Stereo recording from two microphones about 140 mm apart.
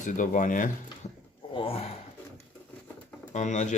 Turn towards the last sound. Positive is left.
turn(degrees=60)  # may be behind; listen again after turning